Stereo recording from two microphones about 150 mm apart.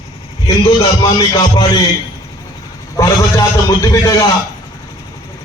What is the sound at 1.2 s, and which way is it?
Speech, 25° left (ahead or behind).